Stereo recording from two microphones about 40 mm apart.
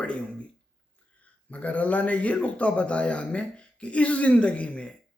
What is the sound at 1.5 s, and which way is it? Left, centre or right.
A man's voice, left.